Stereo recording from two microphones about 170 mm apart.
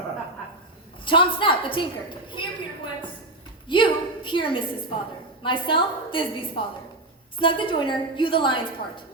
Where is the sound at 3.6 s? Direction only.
30° left (ahead or behind).